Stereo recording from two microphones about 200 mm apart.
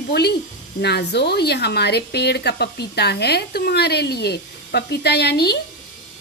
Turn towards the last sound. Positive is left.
turn(degrees=55)  # may be behind; listen again after turning